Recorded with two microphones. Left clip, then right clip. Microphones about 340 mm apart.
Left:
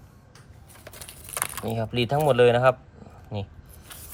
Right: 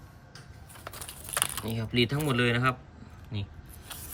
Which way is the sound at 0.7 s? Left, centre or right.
Centre.